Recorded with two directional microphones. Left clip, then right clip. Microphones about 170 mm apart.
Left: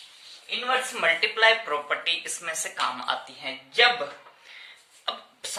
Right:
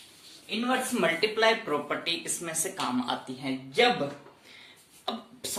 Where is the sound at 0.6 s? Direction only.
Centre (ahead or behind).